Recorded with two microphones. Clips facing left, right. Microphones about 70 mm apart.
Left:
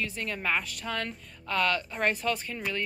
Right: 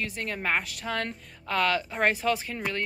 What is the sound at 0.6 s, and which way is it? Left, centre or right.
Speech, right.